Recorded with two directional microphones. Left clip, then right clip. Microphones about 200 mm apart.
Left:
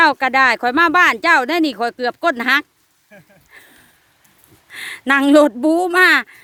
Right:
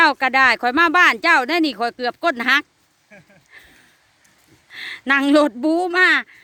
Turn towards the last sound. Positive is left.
turn(degrees=15)  # may be behind; listen again after turning